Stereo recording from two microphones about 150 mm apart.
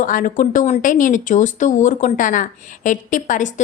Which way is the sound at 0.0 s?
65° left (ahead or behind).